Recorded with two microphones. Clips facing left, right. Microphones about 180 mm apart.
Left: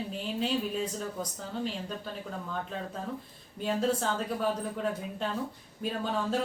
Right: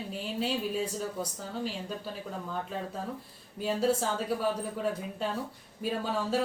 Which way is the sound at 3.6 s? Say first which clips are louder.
Right 1 dB; 5° right (ahead or behind).